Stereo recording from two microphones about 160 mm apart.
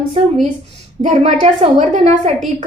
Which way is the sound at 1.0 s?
45° right (ahead or behind).